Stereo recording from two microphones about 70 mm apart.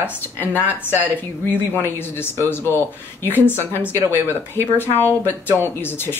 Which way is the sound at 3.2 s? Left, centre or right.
Left.